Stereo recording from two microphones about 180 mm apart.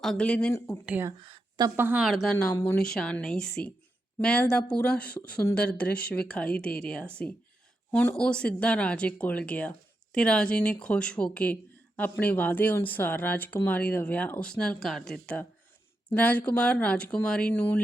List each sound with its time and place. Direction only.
0.0 s speech: 5° left (ahead or behind)
0.9 s speech: 10° right (ahead or behind)
1.2 s speech: 25° right (ahead or behind); by 2.3 s centre (ahead or behind)
2.3 s speech: 10° left (ahead or behind)